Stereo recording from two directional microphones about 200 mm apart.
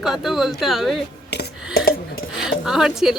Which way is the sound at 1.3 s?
55° left (ahead or behind).